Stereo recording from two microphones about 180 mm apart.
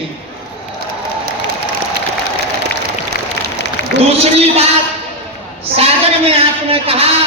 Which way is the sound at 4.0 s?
35° right (ahead or behind).